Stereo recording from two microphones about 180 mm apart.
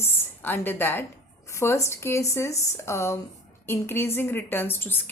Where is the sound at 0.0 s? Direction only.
10° left (ahead or behind).